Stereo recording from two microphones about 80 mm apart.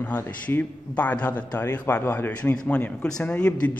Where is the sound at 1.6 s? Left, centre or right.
Left.